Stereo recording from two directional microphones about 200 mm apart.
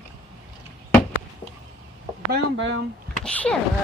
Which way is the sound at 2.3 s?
60° right (ahead or behind).